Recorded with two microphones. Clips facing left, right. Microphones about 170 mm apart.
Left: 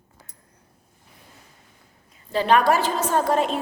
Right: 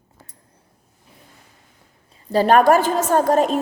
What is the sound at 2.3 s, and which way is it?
A woman's voice, 45° right (ahead or behind).